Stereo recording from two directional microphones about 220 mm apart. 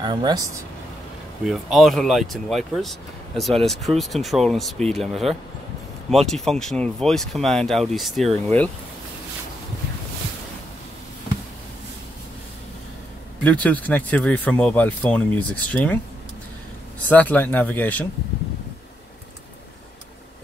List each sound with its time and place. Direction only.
0.0 s speech: 20° right (ahead or behind)
1.4 s speech: centre (ahead or behind)
13.4 s speech: 5° left (ahead or behind)
17.1 s speech: 5° left (ahead or behind)